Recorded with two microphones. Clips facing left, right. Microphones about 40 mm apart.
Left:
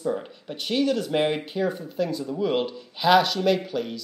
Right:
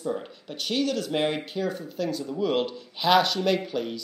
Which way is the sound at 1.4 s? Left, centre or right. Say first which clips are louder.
Left 3 dB; centre.